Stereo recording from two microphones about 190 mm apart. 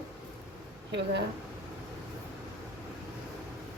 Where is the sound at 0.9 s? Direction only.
65° right (ahead or behind).